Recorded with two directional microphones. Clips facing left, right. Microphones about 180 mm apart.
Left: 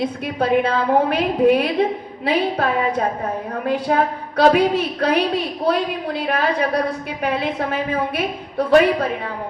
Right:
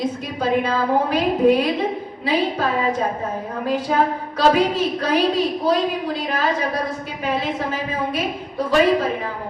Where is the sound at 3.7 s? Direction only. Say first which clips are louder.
Left 1 dB; 60° left (ahead or behind).